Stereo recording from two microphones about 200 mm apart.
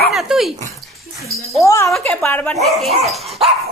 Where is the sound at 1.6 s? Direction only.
15° left (ahead or behind).